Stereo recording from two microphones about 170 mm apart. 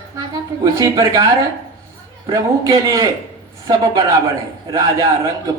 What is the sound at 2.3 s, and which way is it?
Speech, 20° right (ahead or behind).